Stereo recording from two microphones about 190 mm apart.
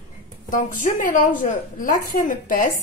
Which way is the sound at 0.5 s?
45° left (ahead or behind).